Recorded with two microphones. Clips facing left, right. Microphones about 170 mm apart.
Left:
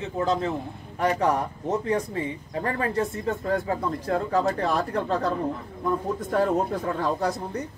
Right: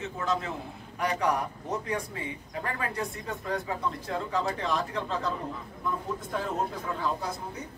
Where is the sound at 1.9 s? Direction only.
35° left (ahead or behind); by 5.3 s 60° left (ahead or behind).